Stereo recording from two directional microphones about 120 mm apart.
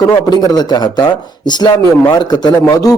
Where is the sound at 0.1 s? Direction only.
35° left (ahead or behind).